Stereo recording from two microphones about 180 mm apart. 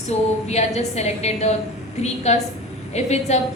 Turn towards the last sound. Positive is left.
turn(degrees=40)  # may be behind; listen again after turning